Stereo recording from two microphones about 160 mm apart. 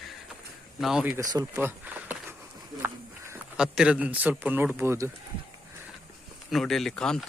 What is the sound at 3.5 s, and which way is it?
A man's voice, 5° right (ahead or behind).